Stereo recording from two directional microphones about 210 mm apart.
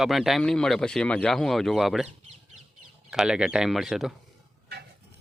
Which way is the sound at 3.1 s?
Centre (ahead or behind).